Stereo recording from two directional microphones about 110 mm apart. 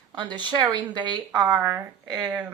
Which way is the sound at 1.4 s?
30° right (ahead or behind).